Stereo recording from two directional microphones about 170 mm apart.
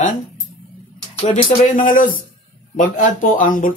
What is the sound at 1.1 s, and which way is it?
Speech, 35° left (ahead or behind).